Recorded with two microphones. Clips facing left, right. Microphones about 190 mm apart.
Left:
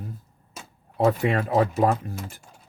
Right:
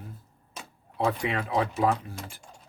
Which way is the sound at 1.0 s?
45° left (ahead or behind).